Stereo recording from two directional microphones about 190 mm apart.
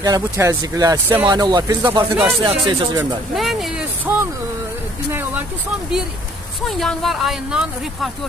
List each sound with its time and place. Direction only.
0.0 s speech: 20° right (ahead or behind)
3.3 s a sound: centre (ahead or behind)
6.7 s speech: centre (ahead or behind)